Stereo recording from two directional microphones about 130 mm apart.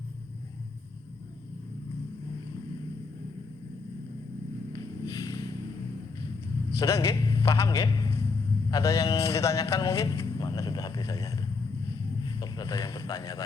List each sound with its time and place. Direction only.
4.7 s music: 30° left (ahead or behind)
6.7 s a man's voice: 25° left (ahead or behind)
8.7 s a sound: 25° left (ahead or behind)
12.4 s speech: 25° left (ahead or behind)